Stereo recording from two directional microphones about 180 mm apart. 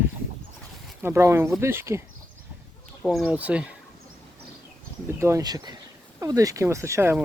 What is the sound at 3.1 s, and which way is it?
Speech, 5° right (ahead or behind).